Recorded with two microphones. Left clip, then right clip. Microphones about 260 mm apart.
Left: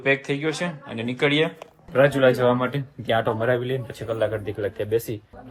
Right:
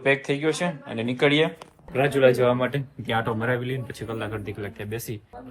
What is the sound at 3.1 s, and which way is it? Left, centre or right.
Speech, left.